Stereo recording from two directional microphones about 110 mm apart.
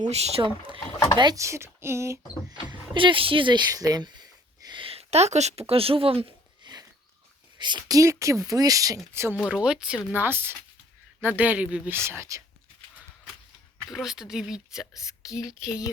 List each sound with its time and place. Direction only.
0.0 s speech: 75° right (ahead or behind)
0.4 s speech: 50° right (ahead or behind)
1.4 s speech: 25° right (ahead or behind)
2.5 s speech: 45° right (ahead or behind)
3.7 s speech: 35° right (ahead or behind); by 6.3 s 60° right (ahead or behind)
6.6 s a sound: 40° right (ahead or behind)
7.6 s speech: 40° right (ahead or behind)
9.5 s speech: 10° right (ahead or behind)
10.2 s speech: 20° right (ahead or behind)
11.9 s speech: 25° right (ahead or behind)
13.8 s speech: 5° right (ahead or behind)
14.9 s a sound: 30° left (ahead or behind)